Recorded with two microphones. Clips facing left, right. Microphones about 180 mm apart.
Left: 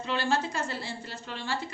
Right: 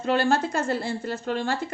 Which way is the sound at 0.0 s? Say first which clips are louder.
Right 6 dB; 50° right (ahead or behind).